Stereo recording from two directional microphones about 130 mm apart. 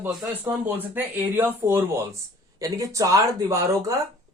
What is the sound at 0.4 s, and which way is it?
Speech, 15° right (ahead or behind).